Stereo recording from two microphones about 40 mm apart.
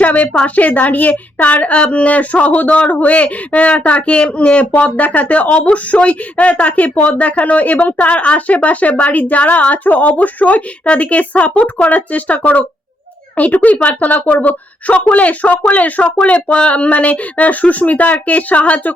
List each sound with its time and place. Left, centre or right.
0.0 s a woman's voice: left